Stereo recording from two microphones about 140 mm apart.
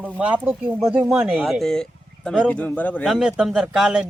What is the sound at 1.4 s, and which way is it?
Speech, centre (ahead or behind).